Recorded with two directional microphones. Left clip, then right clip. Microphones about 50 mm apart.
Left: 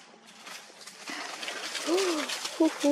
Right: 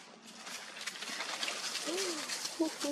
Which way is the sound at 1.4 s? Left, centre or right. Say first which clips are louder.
Even; right.